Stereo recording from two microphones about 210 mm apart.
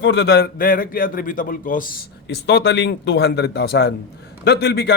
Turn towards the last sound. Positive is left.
turn(degrees=50)  # may be behind; listen again after turning